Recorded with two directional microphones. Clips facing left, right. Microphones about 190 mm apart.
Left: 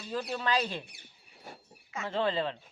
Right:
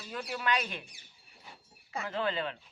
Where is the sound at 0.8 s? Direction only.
65° left (ahead or behind).